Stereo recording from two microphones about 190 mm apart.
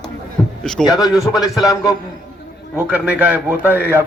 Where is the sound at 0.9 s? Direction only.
20° left (ahead or behind).